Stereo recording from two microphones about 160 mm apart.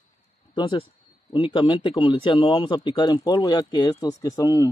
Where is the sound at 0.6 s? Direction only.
30° left (ahead or behind).